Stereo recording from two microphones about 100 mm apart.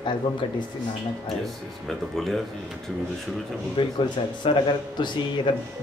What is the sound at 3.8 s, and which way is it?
Speech, 55° left (ahead or behind).